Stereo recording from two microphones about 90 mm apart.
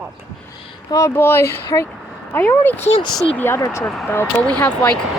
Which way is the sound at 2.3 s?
20° left (ahead or behind).